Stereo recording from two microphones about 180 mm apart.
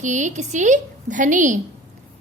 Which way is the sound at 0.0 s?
45° right (ahead or behind).